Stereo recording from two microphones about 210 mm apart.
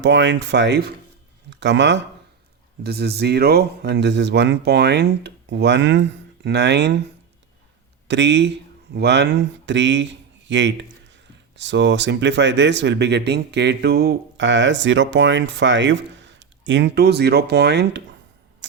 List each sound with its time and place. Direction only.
0.0 s speech: 60° right (ahead or behind)
8.0 s speech: 55° right (ahead or behind)